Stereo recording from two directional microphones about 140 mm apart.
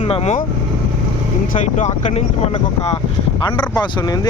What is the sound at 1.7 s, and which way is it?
Speech, 60° left (ahead or behind).